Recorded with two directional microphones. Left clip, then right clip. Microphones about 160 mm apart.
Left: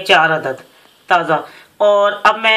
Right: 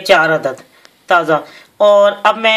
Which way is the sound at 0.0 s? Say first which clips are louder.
Right 1 dB; 60° right (ahead or behind).